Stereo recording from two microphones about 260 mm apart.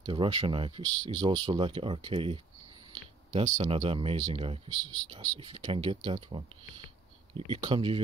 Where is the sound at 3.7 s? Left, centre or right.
Right.